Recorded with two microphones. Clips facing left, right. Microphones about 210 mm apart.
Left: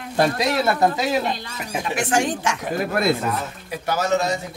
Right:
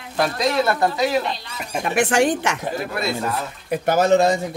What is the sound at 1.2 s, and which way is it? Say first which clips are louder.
Speech: left 2 dB; 50° left (ahead or behind).